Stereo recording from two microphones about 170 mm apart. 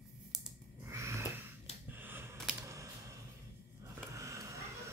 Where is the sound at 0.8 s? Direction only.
15° right (ahead or behind).